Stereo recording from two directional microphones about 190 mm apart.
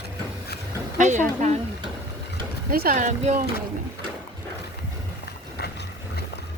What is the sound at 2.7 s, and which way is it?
Speech, 50° right (ahead or behind).